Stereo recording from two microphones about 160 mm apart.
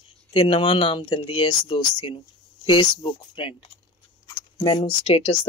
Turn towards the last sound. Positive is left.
turn(degrees=35)  # may be behind; listen again after turning